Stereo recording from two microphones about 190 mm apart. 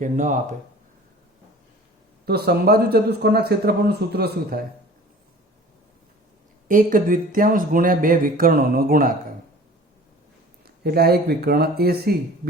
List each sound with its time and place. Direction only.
0.0 s speech: 40° right (ahead or behind)
2.2 s speech: 55° right (ahead or behind)
6.7 s speech: 45° right (ahead or behind)
10.8 s speech: 55° right (ahead or behind)